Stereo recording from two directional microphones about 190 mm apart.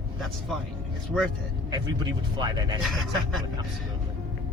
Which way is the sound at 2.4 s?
25° right (ahead or behind).